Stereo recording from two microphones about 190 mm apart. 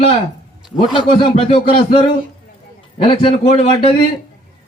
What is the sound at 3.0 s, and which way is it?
Speech, 30° left (ahead or behind).